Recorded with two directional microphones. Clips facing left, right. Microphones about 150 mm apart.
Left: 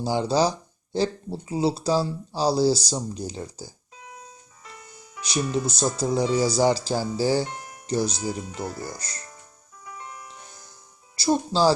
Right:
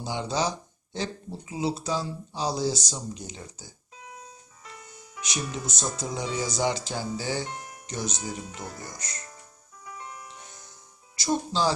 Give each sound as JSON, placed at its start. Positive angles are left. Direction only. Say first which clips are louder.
{"t": 0.0, "sound": "speech", "louder": "left 6 dB", "side_deg": 35}
{"t": 5.2, "sound": "speech", "louder": "left 8 dB", "side_deg": 35}
{"t": 11.2, "sound": "speech", "louder": "left 5 dB", "side_deg": 35}